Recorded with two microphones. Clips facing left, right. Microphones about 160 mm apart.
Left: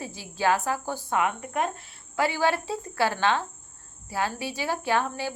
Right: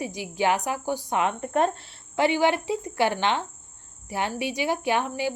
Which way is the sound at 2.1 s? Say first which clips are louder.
Right 3 dB; 20° right (ahead or behind).